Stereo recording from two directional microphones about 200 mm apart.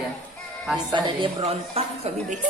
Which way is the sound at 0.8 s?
20° right (ahead or behind).